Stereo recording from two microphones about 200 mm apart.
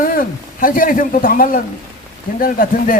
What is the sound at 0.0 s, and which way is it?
A man's voice, 45° left (ahead or behind).